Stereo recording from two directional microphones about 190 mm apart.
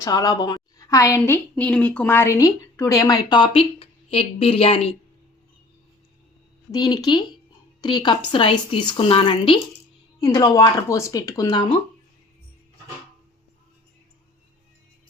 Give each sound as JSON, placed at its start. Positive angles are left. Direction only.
{"t": 0.0, "sound": "a woman's voice", "side_deg": 20}
{"t": 6.7, "sound": "a woman's voice", "side_deg": 20}